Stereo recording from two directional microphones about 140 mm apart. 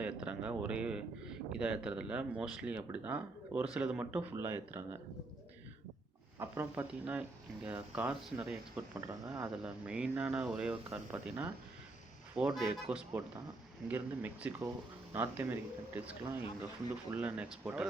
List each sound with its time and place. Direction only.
0.0 s speech: 10° right (ahead or behind)
6.4 s speech: 15° right (ahead or behind)
9.0 s speech: 20° right (ahead or behind)
9.6 s speech: 5° right (ahead or behind)